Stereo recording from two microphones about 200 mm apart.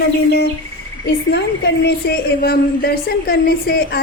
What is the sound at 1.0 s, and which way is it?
A woman's voice, 60° left (ahead or behind).